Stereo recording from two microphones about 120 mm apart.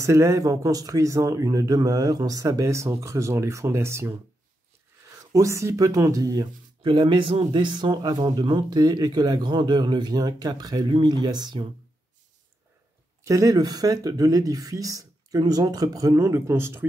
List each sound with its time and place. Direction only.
0.0 s speech: 25° right (ahead or behind)
5.2 s speech: 25° right (ahead or behind)
13.2 s speech: 25° right (ahead or behind)